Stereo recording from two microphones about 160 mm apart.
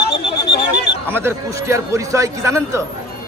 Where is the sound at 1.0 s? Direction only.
15° right (ahead or behind).